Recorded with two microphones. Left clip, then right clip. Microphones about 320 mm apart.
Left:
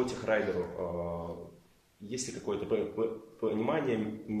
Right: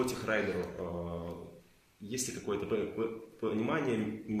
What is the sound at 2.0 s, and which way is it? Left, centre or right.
A man's voice, left.